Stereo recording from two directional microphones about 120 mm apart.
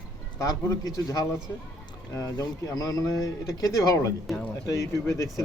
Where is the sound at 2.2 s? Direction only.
30° left (ahead or behind).